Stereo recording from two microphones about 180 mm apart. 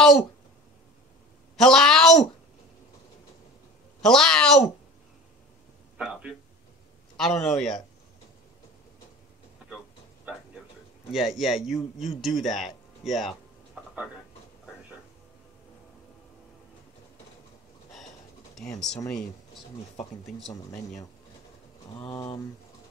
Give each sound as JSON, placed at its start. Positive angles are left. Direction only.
{"t": 1.6, "sound": "a woman's voice", "side_deg": 0}
{"t": 4.0, "sound": "a woman's voice", "side_deg": 5}
{"t": 5.9, "sound": "a sound", "side_deg": -5}
{"t": 7.2, "sound": "a man's voice", "side_deg": 0}
{"t": 11.1, "sound": "a man's voice", "side_deg": 0}
{"t": 18.5, "sound": "speech", "side_deg": 5}
{"t": 21.9, "sound": "speech", "side_deg": 30}